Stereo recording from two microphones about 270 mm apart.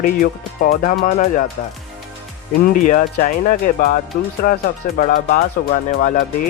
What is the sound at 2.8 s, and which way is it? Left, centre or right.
Speech, left.